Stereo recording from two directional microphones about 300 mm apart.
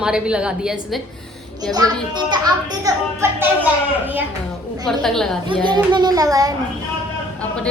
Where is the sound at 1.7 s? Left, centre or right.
Centre.